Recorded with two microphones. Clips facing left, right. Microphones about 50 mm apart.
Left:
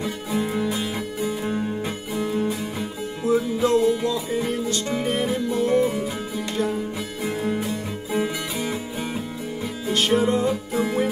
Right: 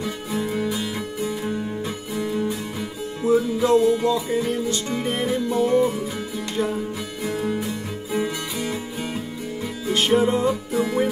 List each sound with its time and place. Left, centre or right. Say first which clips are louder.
0.3 s music: left 1 dB; centre; by 2.5 s left
3.3 s music: right 2 dB; centre
7.2 s music: even; centre
9.9 s music: right 1 dB; centre